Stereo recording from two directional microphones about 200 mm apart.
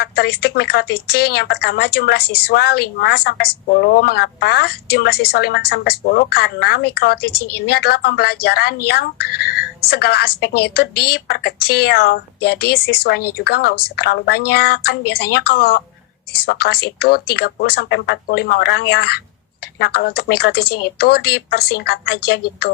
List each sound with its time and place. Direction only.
0.0 s a woman's voice: 55° left (ahead or behind)